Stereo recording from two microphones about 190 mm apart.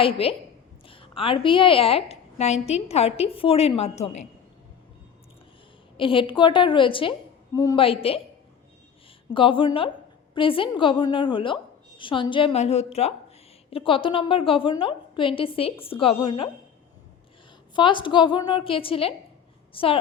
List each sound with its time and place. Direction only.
0.0 s a woman's voice: 30° left (ahead or behind)
6.0 s a woman's voice: 25° left (ahead or behind)
7.9 s a woman's voice: 30° left (ahead or behind)
9.3 s a woman's voice: 25° left (ahead or behind)
17.7 s a woman's voice: 25° left (ahead or behind)